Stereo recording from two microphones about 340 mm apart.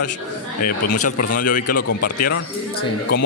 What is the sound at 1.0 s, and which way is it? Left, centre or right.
A man's voice, left.